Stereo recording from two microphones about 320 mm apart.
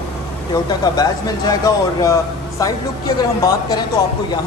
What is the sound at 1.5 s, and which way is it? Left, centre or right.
Speech, centre.